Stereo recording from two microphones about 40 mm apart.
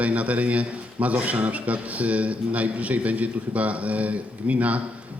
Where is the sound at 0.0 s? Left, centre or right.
Right.